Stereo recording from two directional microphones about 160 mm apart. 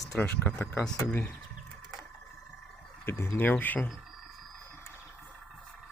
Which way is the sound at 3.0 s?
15° left (ahead or behind).